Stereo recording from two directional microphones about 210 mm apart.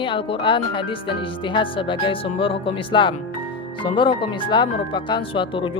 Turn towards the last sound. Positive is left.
turn(degrees=25)  # may be behind; listen again after turning